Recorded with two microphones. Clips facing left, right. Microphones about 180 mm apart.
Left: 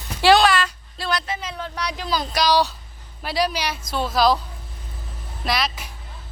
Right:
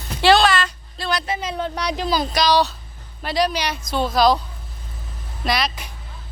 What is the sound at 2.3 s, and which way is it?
A woman's voice, 10° left (ahead or behind).